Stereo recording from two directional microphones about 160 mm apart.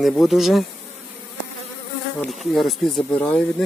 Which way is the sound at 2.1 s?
Centre (ahead or behind).